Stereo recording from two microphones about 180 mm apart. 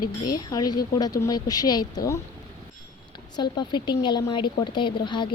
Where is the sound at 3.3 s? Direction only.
25° left (ahead or behind).